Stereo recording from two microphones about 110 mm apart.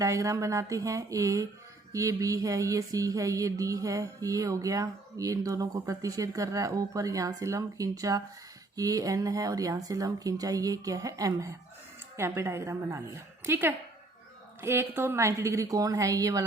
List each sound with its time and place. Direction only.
0.0 s speech: 30° right (ahead or behind)
1.9 s music: 30° right (ahead or behind)
12.1 s speech: 25° right (ahead or behind)